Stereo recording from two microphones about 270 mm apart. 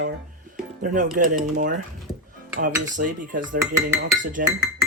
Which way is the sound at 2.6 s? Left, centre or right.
Right.